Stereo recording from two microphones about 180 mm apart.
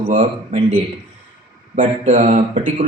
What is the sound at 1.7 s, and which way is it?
Speech, 45° right (ahead or behind).